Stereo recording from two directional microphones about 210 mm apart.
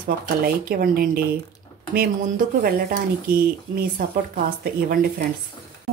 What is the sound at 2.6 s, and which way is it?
Speech, 45° right (ahead or behind).